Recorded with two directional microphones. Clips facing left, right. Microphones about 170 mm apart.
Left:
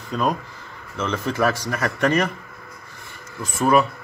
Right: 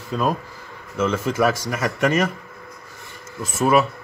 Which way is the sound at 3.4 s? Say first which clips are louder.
Even; 5° right (ahead or behind).